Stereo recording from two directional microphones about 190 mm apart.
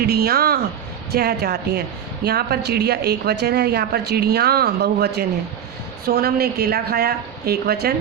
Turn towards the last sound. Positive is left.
turn(degrees=-55)  # may be behind; listen again after turning